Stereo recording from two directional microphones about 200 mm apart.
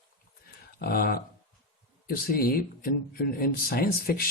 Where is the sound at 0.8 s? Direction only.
45° left (ahead or behind).